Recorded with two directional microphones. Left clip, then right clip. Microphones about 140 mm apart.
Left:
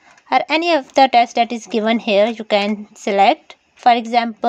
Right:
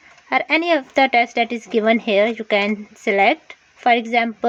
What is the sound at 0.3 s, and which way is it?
A woman's voice, 35° left (ahead or behind).